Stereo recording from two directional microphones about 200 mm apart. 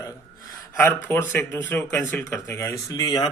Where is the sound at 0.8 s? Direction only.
10° left (ahead or behind).